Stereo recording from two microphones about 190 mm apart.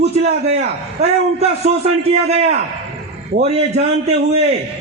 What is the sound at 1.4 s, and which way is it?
A man's voice, 35° right (ahead or behind).